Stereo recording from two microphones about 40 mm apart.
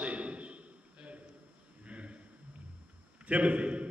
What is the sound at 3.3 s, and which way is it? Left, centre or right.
Speech, right.